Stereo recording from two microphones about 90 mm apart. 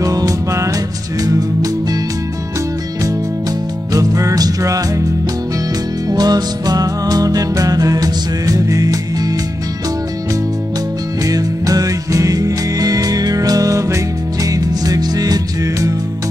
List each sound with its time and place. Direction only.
0.0 s music: 40° right (ahead or behind)
3.9 s music: 40° right (ahead or behind)
6.0 s music: 50° right (ahead or behind)
11.2 s music: 45° right (ahead or behind)